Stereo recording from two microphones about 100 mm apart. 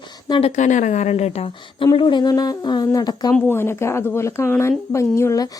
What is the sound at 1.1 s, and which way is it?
Speech, 90° left.